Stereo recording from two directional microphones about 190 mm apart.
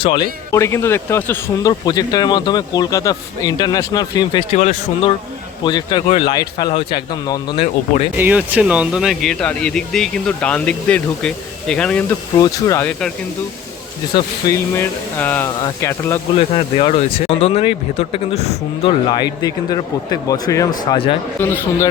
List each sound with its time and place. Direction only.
0.0 s speech: 25° left (ahead or behind)
4.5 s speech: 35° left (ahead or behind)
5.6 s speech: 25° left (ahead or behind)
8.1 s speech: 10° right (ahead or behind)
12.4 s speech: 15° left (ahead or behind)
14.1 s speech: 15° left (ahead or behind)
16.4 s speech: 30° left (ahead or behind)
21.4 s speech: 10° left (ahead or behind)